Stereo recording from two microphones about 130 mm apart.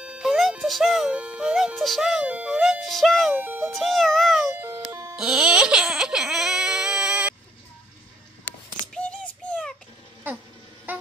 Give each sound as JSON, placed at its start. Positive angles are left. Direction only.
{"t": 0.0, "sound": "speech", "side_deg": -5}
{"t": 3.3, "sound": "speech", "side_deg": -15}
{"t": 3.7, "sound": "a child's voice", "side_deg": 0}
{"t": 5.1, "sound": "baby cry", "side_deg": -5}
{"t": 8.9, "sound": "a sound", "side_deg": 10}
{"t": 10.9, "sound": "a sound", "side_deg": -15}